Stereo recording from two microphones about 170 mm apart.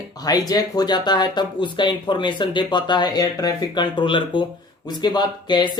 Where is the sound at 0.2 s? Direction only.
20° left (ahead or behind).